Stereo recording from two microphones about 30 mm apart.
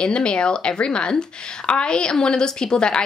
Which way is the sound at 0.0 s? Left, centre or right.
Left.